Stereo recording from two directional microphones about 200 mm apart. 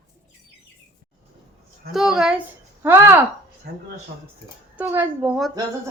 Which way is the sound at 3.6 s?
50° right (ahead or behind).